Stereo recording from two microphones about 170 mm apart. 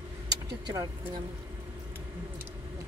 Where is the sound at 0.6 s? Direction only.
25° right (ahead or behind).